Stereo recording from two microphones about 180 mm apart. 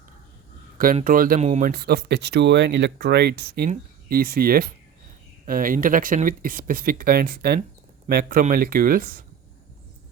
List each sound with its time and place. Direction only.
1.0 s speech: 50° right (ahead or behind)
1.4 s speech: 40° right (ahead or behind)
1.7 s speech: 60° right (ahead or behind)